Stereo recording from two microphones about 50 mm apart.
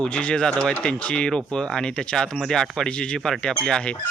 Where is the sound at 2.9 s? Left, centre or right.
Centre.